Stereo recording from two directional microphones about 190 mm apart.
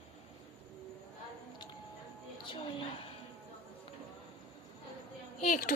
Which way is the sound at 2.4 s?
25° left (ahead or behind).